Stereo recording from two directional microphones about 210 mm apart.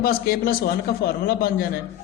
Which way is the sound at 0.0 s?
45° left (ahead or behind).